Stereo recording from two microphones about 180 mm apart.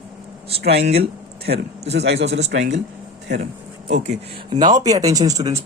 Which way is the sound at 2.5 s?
90° right.